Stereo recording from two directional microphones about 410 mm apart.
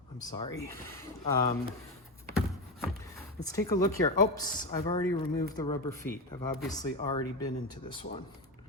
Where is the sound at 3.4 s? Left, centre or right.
Centre.